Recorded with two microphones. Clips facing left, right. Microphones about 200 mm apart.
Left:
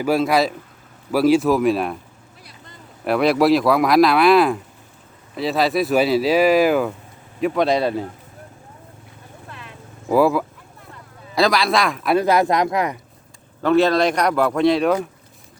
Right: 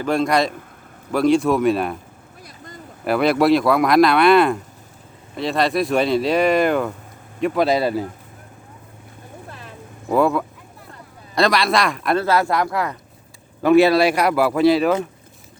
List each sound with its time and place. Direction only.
0.0 s speech: 5° left (ahead or behind)
3.0 s speech: centre (ahead or behind)
9.5 s vehicle: 40° right (ahead or behind)
10.1 s speech: 5° left (ahead or behind)
12.1 s speech: 15° left (ahead or behind)
13.6 s speech: 10° right (ahead or behind)